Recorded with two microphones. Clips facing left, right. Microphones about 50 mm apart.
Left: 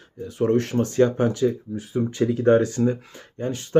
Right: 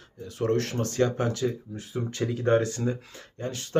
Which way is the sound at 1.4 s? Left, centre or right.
Centre.